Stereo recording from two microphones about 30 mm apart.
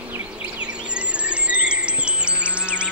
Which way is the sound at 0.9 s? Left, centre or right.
Right.